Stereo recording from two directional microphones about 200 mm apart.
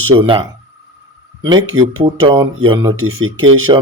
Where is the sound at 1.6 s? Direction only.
90° right.